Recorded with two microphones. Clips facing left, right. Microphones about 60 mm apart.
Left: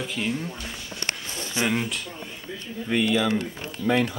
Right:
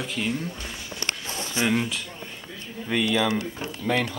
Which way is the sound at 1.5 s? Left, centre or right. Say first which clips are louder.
Right 1 dB; centre.